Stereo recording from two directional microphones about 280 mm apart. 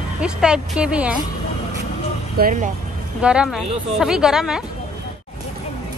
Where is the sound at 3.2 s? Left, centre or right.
Centre.